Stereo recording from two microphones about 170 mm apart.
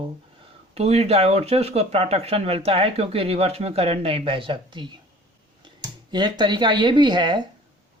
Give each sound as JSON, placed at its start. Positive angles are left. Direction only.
{"t": 0.7, "sound": "speech", "side_deg": -35}
{"t": 6.1, "sound": "speech", "side_deg": -25}